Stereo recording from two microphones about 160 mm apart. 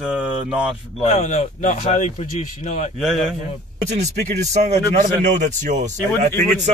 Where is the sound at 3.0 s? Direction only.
Centre (ahead or behind).